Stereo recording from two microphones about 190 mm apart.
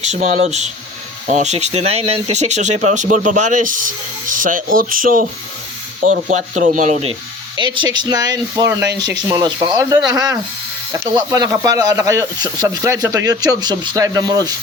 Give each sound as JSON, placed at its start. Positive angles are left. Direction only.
{"t": 0.0, "sound": "speech", "side_deg": -35}
{"t": 7.5, "sound": "speech", "side_deg": -25}